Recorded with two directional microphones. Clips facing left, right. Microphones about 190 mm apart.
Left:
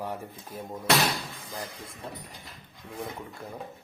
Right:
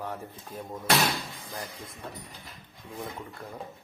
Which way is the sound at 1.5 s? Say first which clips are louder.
Left 1 dB; 10° left (ahead or behind).